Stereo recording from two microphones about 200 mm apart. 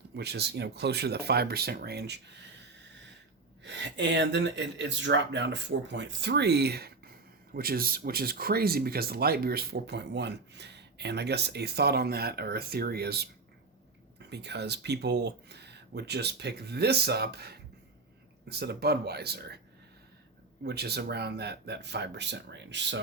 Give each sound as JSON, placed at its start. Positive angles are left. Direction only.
{"t": 0.2, "sound": "speech", "side_deg": -55}
{"t": 3.6, "sound": "speech", "side_deg": -60}
{"t": 20.7, "sound": "speech", "side_deg": -55}